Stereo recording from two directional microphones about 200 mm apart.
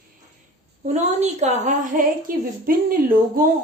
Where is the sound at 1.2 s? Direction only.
35° right (ahead or behind).